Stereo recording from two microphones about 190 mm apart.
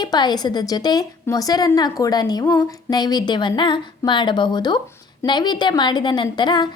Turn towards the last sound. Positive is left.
turn(degrees=25)  # may be behind; listen again after turning